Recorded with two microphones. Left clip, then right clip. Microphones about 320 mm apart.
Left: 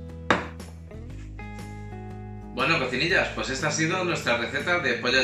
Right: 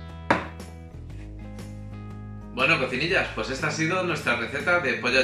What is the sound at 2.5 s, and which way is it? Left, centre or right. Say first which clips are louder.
Speech: right 1 dB; centre.